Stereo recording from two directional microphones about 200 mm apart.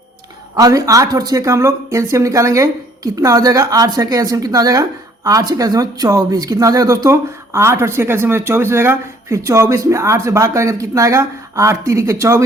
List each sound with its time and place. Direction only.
0.5 s speech: 15° right (ahead or behind)